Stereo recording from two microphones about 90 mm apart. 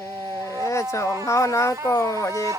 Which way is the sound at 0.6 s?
35° left (ahead or behind).